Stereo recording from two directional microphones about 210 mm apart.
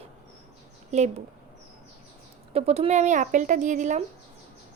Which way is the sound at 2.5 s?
30° right (ahead or behind).